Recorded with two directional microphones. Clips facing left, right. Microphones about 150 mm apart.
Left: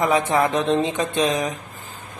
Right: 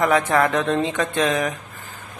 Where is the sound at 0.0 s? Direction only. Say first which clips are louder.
Right 1 dB; 20° left (ahead or behind).